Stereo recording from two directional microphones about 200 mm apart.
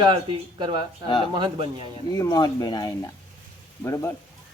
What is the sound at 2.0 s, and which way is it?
Speech, 20° left (ahead or behind).